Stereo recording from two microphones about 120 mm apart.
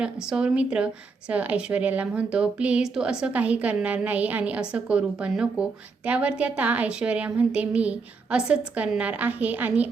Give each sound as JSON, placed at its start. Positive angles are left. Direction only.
{"t": 0.0, "sound": "a woman's voice", "side_deg": -5}